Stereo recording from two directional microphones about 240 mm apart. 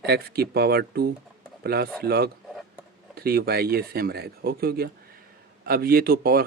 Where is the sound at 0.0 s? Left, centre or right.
Right.